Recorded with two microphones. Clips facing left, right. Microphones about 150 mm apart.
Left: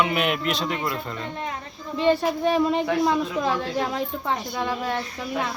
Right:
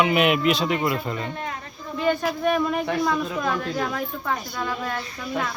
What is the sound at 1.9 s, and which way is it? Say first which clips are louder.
A woman's voice: left 2 dB; 30° left (ahead or behind).